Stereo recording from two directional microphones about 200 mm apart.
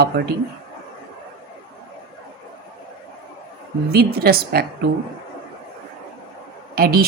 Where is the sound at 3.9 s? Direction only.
50° right (ahead or behind).